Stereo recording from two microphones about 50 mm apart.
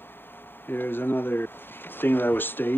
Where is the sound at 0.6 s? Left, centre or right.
Left.